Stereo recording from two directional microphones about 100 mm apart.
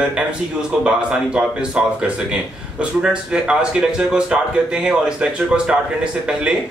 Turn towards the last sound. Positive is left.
turn(degrees=-10)  # may be behind; listen again after turning